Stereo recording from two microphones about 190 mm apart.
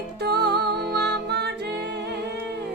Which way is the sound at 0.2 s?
60° right (ahead or behind).